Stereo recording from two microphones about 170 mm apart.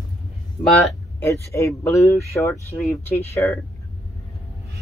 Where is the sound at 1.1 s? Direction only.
15° left (ahead or behind).